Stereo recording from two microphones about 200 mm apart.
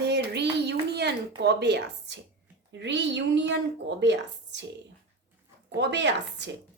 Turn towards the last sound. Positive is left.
turn(degrees=-60)  # may be behind; listen again after turning